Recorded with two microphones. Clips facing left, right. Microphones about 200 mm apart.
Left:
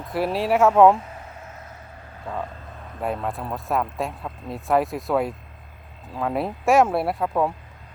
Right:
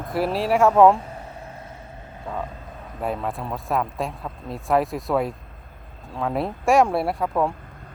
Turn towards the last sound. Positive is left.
turn(degrees=0)  # may be behind; listen again after turning